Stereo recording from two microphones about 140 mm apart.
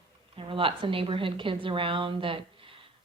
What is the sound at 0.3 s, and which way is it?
A woman's voice, 40° right (ahead or behind).